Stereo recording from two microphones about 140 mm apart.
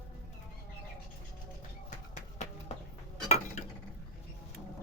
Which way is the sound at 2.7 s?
50° left (ahead or behind).